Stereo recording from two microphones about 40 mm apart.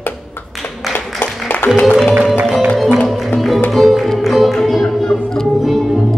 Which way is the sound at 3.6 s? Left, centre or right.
Centre.